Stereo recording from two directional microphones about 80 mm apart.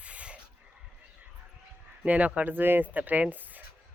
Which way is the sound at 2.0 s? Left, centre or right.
Centre.